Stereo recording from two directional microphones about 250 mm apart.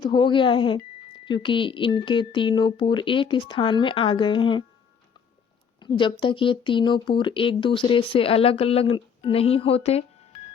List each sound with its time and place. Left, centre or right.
0.0 s speech: centre
5.8 s speech: centre